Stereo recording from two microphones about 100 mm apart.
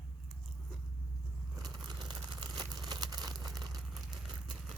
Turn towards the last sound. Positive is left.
turn(degrees=-40)  # may be behind; listen again after turning